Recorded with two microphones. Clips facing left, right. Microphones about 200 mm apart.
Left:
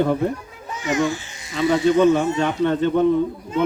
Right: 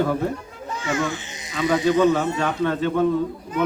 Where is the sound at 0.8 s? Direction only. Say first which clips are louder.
Left 4 dB; 20° left (ahead or behind).